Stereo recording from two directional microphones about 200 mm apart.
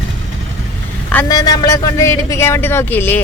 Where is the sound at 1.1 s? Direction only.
15° left (ahead or behind).